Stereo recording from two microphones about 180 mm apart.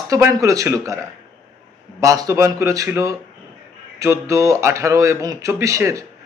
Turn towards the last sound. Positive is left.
turn(degrees=-15)  # may be behind; listen again after turning